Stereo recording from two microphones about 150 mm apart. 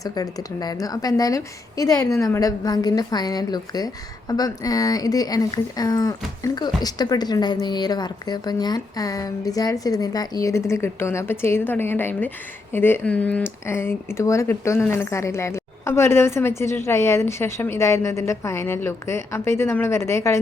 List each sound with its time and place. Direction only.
0.0 s a woman's voice: 25° left (ahead or behind)